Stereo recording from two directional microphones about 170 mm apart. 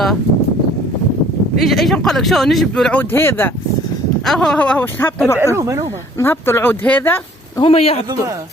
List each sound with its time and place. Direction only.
1.5 s speech: centre (ahead or behind)
5.4 s speech: 15° right (ahead or behind)
6.1 s speech: 15° left (ahead or behind)
7.6 s a man's voice: 35° left (ahead or behind)